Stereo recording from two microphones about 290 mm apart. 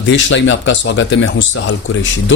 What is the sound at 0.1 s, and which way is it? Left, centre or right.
Speech, left.